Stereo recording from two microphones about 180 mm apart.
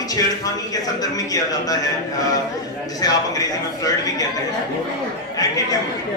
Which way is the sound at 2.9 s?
20° left (ahead or behind).